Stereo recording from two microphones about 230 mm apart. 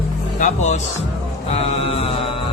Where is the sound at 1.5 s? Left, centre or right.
Left.